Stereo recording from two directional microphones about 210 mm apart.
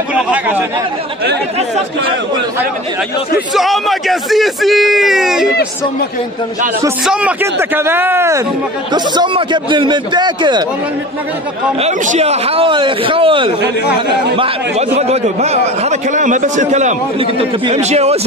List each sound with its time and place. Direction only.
0.1 s speech: 5° right (ahead or behind)
3.3 s speech: centre (ahead or behind)
7.1 s a man's voice: 5° right (ahead or behind); by 10.6 s 20° right (ahead or behind)
11.8 s a man's voice: 30° right (ahead or behind)